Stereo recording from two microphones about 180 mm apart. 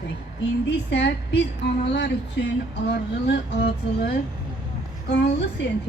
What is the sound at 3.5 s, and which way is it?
Speech, 70° left (ahead or behind).